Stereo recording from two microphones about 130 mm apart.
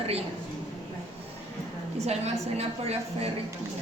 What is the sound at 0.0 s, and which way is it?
Speech, 50° right (ahead or behind).